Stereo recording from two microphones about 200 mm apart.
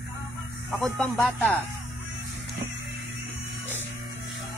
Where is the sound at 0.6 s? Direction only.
Centre (ahead or behind).